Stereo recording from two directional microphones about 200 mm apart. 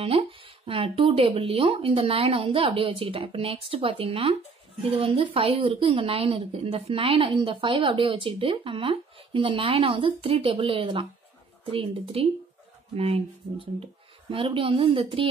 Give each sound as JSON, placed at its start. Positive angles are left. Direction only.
{"t": 0.1, "sound": "a woman's voice", "side_deg": -30}